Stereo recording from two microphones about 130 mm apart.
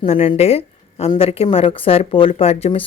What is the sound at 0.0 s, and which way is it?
A woman's voice, 45° left (ahead or behind).